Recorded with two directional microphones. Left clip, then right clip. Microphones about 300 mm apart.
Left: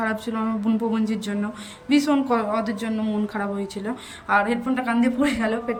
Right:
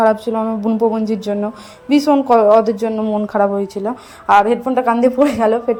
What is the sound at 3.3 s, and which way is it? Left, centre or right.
Speech, right.